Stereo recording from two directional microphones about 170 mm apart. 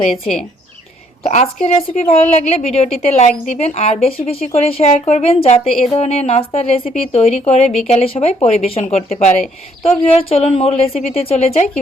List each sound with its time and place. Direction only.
0.1 s speech: centre (ahead or behind)
1.2 s a woman's voice: 40° left (ahead or behind)
7.7 s speech: centre (ahead or behind)
7.9 s a woman's voice: 35° left (ahead or behind)